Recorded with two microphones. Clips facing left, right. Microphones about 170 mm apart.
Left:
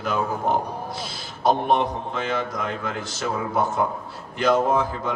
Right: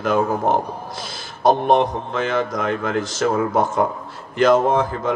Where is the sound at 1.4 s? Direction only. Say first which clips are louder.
Right 4 dB; 45° right (ahead or behind).